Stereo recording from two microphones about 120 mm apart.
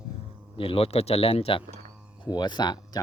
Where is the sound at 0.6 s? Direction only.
50° left (ahead or behind).